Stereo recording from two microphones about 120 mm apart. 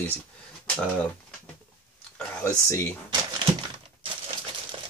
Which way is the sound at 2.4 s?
25° left (ahead or behind).